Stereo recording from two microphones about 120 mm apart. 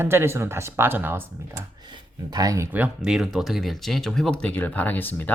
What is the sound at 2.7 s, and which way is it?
Speech, 10° right (ahead or behind).